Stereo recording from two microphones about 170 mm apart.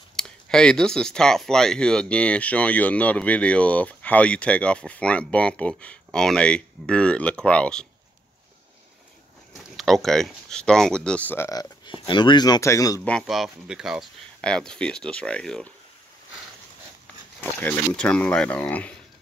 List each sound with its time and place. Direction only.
0.1 s speech: 5° left (ahead or behind)
9.8 s speech: centre (ahead or behind)
11.8 s speech: 25° left (ahead or behind)
13.0 s speech: 5° left (ahead or behind)
17.4 s speech: 10° left (ahead or behind)